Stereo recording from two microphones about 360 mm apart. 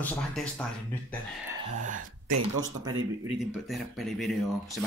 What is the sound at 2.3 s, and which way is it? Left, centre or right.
Speech, right.